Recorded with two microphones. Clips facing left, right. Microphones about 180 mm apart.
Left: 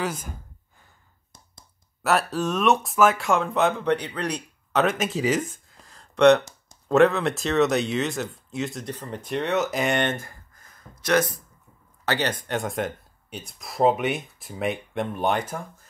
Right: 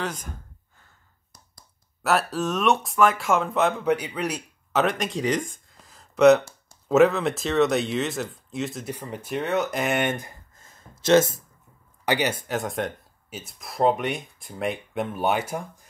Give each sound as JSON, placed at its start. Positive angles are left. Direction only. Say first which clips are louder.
{"t": 0.0, "sound": "speech", "louder": "left 2 dB", "side_deg": 10}
{"t": 2.0, "sound": "speech", "louder": "even", "side_deg": 0}
{"t": 10.1, "sound": "a sound", "louder": "right 1 dB", "side_deg": -20}
{"t": 12.0, "sound": "speech", "louder": "right 2 dB", "side_deg": -10}